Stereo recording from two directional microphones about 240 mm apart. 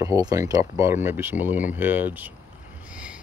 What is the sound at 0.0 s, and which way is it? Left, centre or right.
Speech, centre.